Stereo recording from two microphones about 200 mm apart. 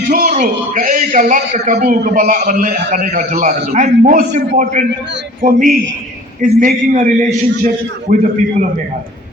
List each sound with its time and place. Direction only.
0.1 s a man's voice: 40° right (ahead or behind)